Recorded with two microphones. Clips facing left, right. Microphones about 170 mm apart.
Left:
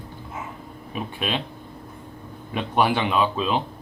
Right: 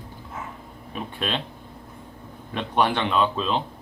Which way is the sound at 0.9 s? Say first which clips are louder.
Left 1 dB; 5° left (ahead or behind).